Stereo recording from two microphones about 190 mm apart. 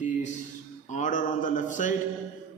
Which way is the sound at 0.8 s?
40° left (ahead or behind).